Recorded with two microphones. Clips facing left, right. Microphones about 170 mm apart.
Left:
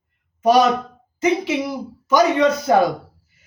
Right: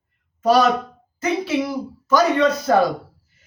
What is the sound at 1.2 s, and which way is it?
A man's voice, 20° left (ahead or behind).